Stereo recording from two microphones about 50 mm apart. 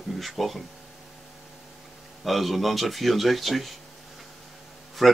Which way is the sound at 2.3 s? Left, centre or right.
Centre.